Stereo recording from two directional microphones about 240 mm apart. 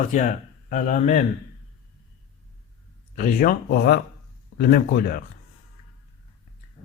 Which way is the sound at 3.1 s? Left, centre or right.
Left.